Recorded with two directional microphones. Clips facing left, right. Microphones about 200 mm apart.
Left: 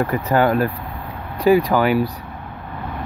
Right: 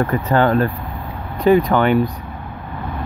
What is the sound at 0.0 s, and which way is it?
Speech, 10° left (ahead or behind).